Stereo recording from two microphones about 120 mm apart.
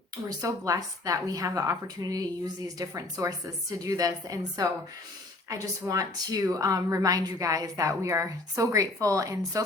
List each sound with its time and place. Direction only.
0.3 s a woman's voice: 30° right (ahead or behind)